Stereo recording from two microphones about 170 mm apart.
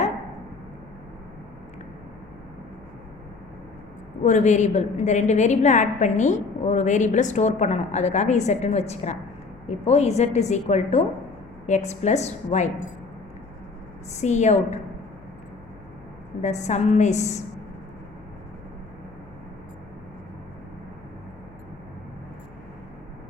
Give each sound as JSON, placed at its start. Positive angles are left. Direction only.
{"t": 4.2, "sound": "a woman's voice", "side_deg": 45}
{"t": 14.1, "sound": "a woman's voice", "side_deg": 45}
{"t": 16.4, "sound": "a woman's voice", "side_deg": 40}